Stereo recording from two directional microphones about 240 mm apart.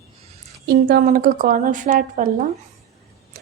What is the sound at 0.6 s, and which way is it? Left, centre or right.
A woman's voice, right.